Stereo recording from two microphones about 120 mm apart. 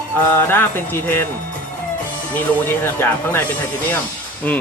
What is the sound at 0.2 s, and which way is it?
Speech, 20° left (ahead or behind).